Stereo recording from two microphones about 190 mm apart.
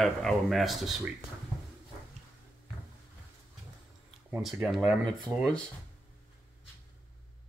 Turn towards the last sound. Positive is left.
turn(degrees=5)  # may be behind; listen again after turning